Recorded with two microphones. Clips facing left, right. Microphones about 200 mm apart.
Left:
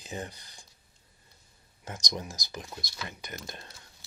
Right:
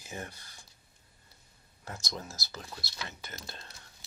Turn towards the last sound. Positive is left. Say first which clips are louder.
# left 4 dB
turn(degrees=15)  # may be behind; listen again after turning